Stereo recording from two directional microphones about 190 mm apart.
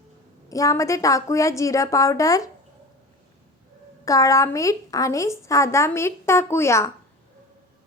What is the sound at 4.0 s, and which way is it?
A woman's voice, 15° left (ahead or behind).